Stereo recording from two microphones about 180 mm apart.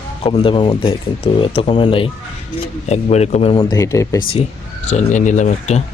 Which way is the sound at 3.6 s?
20° left (ahead or behind).